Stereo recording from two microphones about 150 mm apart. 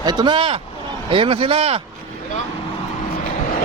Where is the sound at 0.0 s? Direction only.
30° right (ahead or behind).